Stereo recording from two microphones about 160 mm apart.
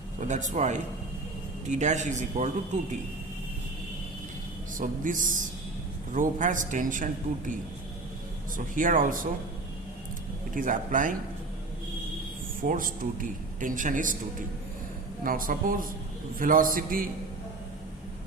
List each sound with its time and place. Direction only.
0.2 s a man's voice: 50° right (ahead or behind)
4.8 s a man's voice: 55° right (ahead or behind)
8.5 s speech: 55° right (ahead or behind)
10.5 s speech: 55° right (ahead or behind)
12.6 s speech: 60° right (ahead or behind)
15.2 s speech: 60° right (ahead or behind)